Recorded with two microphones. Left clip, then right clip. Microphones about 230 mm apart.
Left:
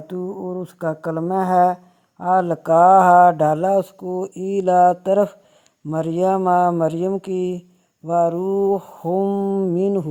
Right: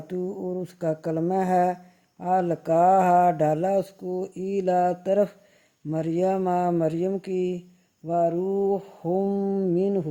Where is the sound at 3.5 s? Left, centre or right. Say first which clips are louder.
Left 6 dB; left.